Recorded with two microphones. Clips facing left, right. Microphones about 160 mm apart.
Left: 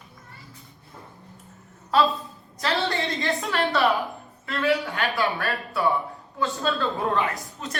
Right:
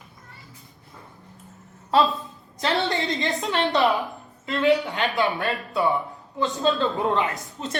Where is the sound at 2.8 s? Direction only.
20° right (ahead or behind).